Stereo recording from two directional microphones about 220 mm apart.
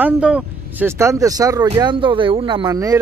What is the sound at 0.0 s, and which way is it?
Speech, 5° right (ahead or behind).